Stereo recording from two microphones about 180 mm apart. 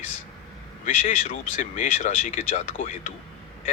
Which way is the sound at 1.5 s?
45° left (ahead or behind).